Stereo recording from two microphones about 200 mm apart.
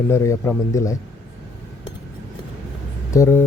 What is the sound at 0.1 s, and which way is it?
Speech, 15° left (ahead or behind).